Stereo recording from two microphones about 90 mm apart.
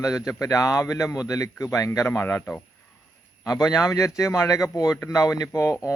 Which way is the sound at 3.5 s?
45° left (ahead or behind).